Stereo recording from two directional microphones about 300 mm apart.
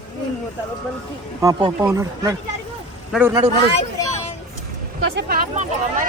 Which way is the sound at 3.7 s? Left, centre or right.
Centre.